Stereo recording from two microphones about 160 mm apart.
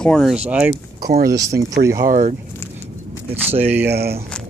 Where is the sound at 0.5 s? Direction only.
5° right (ahead or behind).